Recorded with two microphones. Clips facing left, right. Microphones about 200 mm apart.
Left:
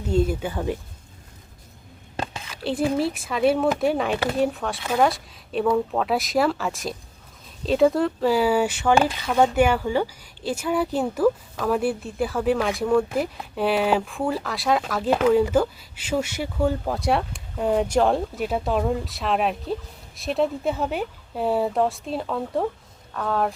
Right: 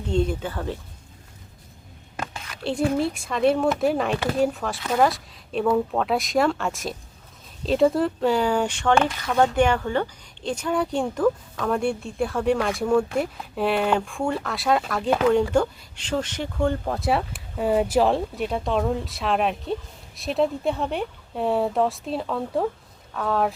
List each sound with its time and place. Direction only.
0.1 s speech: 5° left (ahead or behind)
2.1 s a sound: 25° left (ahead or behind)
2.6 s speech: centre (ahead or behind)